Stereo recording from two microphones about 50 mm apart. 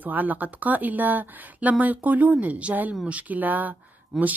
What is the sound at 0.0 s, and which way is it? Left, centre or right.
Speech, right.